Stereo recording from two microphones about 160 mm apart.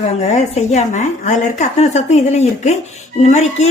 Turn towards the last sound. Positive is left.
turn(degrees=45)  # may be behind; listen again after turning